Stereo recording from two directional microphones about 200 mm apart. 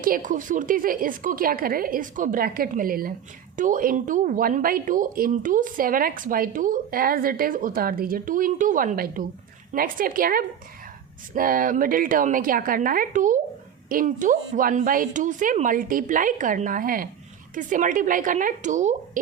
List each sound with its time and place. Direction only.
0.0 s a woman's voice: 40° right (ahead or behind)